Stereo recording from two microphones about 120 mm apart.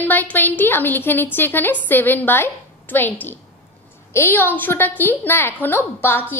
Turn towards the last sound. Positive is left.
turn(degrees=20)  # may be behind; listen again after turning